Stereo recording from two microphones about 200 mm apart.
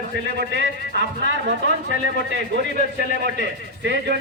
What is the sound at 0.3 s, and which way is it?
Speech, 60° right (ahead or behind).